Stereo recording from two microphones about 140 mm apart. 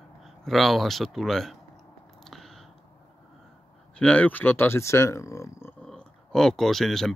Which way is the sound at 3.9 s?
10° left (ahead or behind).